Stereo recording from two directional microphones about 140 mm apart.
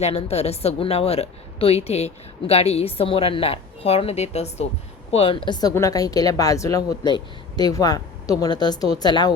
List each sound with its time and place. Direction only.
0.0 s a woman's voice: 45° left (ahead or behind); by 9.3 s 30° left (ahead or behind)